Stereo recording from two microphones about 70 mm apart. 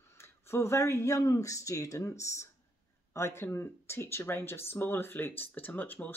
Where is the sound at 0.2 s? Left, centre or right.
Left.